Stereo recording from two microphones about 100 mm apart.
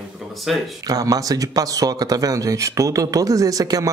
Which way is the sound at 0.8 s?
40° right (ahead or behind).